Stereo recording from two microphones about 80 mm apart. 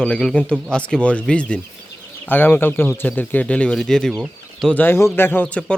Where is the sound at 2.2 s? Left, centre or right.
Left; by 4.1 s centre.